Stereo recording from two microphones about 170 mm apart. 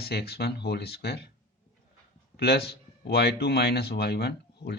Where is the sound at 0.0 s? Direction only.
70° left (ahead or behind).